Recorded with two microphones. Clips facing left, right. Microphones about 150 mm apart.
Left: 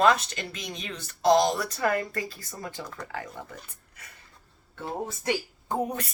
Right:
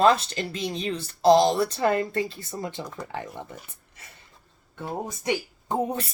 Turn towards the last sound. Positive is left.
turn(degrees=-25)  # may be behind; listen again after turning